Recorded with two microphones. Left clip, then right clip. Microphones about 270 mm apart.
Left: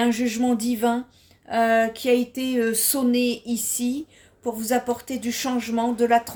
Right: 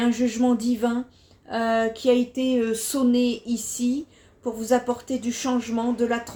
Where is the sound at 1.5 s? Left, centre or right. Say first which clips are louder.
Left 3 dB; left.